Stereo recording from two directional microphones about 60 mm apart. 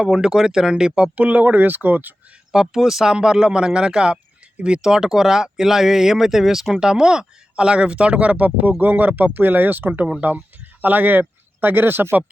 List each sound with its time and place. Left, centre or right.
0.0 s speech: centre
1.1 s speech: right
2.5 s speech: centre; by 12.2 s right